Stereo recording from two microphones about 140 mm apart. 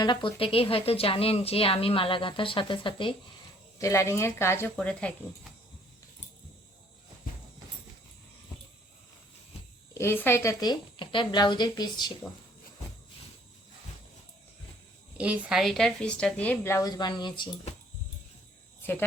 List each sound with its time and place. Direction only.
0.0 s a woman's voice: 35° left (ahead or behind)
3.8 s speech: 20° left (ahead or behind)
9.9 s a woman's voice: 20° left (ahead or behind)
10.7 s a woman's voice: 35° left (ahead or behind)
15.2 s speech: 5° right (ahead or behind); by 16.7 s 10° left (ahead or behind)
16.7 s a woman's voice: 30° left (ahead or behind)
18.8 s cricket: 15° left (ahead or behind)